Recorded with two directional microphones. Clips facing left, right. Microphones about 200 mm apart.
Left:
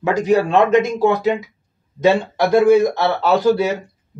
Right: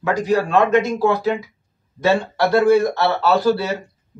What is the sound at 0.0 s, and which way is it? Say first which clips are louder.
Speech: left 3 dB; 20° left (ahead or behind).